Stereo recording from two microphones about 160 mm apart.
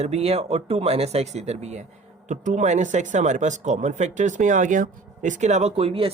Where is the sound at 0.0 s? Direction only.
40° right (ahead or behind).